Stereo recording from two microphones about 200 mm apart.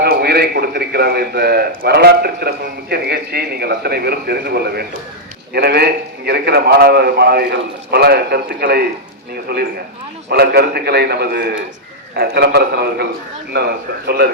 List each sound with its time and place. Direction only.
0.0 s a man's voice: 50° right (ahead or behind)